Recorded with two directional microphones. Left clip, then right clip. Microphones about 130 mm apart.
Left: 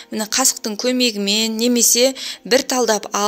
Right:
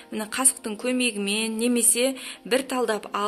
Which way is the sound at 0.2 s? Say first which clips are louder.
Left 9 dB; 50° left (ahead or behind).